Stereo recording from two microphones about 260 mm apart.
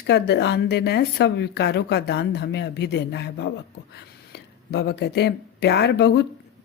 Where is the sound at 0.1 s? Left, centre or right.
Left.